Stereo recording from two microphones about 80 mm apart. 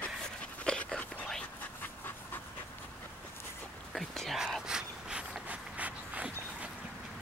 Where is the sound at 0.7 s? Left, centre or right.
Centre.